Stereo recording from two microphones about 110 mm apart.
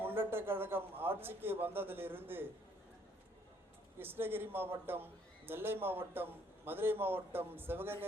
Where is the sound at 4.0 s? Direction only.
20° right (ahead or behind).